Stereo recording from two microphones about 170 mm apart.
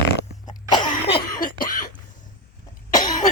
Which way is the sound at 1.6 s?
55° left (ahead or behind).